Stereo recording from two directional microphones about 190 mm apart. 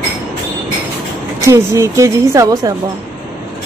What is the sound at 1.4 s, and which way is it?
A woman's voice, 15° right (ahead or behind).